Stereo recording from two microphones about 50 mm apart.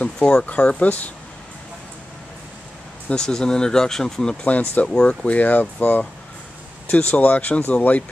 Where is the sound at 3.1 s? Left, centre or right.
Centre.